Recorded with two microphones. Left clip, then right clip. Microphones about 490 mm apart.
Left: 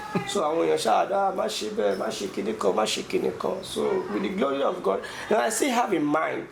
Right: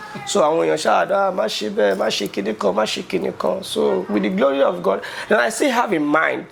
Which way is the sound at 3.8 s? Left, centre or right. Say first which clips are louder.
Right 8 dB; right.